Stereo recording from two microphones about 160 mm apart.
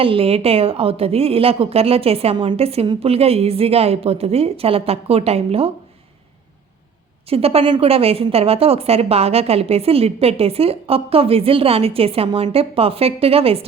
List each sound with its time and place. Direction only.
0.0 s a woman's voice: 35° right (ahead or behind)
7.3 s a woman's voice: 40° right (ahead or behind)